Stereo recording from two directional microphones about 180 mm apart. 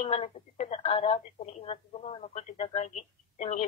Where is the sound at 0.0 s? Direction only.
35° left (ahead or behind).